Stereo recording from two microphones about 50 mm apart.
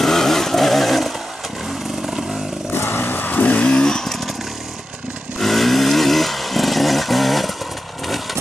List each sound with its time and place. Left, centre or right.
0.0 s vehicle: centre
2.7 s vehicle: left
3.6 s vehicle: centre
5.4 s vehicle: centre